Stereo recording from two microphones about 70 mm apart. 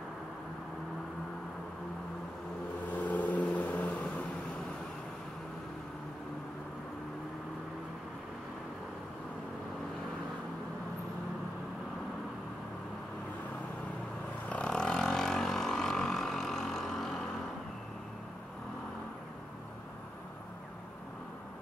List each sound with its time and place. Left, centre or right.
2.9 s vehicle: left
14.5 s vehicle: centre